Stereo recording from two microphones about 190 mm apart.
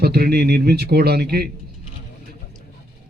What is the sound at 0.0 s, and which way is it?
Speech, 55° right (ahead or behind).